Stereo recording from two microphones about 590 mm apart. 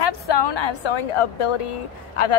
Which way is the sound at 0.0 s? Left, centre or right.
Left.